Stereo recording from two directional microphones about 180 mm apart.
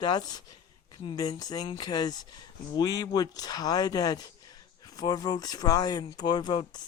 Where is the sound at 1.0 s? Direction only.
25° left (ahead or behind).